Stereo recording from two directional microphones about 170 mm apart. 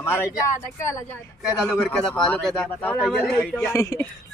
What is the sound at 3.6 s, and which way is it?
Speech, 20° left (ahead or behind).